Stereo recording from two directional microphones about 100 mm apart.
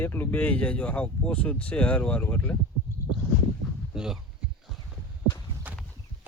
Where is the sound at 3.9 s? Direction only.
5° right (ahead or behind).